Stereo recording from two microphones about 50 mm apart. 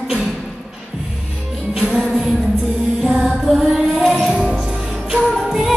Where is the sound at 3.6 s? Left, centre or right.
Centre.